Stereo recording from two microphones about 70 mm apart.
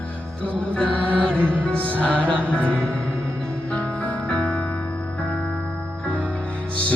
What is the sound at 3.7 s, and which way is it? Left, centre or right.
Music, left.